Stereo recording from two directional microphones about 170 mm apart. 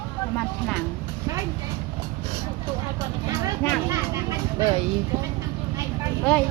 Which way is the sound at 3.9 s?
20° right (ahead or behind).